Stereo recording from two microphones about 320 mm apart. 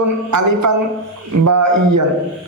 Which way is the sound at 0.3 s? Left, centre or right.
Right.